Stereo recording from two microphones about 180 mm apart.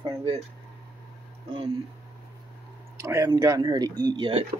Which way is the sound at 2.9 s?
15° right (ahead or behind).